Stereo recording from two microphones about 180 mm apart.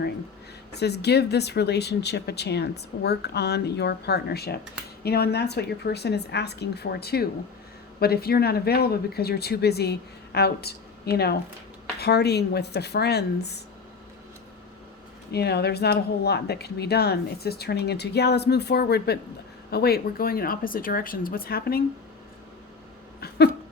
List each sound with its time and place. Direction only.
0.8 s speech: 65° left (ahead or behind)
15.3 s speech: 65° left (ahead or behind)